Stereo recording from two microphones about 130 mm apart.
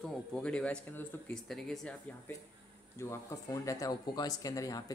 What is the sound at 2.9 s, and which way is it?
Speech, 20° left (ahead or behind).